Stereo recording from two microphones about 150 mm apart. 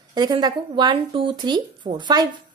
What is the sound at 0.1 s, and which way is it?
A woman's voice, 30° right (ahead or behind).